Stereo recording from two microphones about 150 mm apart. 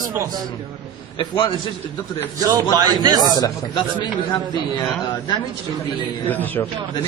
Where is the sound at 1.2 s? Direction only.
35° left (ahead or behind).